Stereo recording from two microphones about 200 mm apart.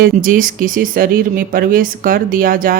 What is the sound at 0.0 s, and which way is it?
Speech, 45° right (ahead or behind).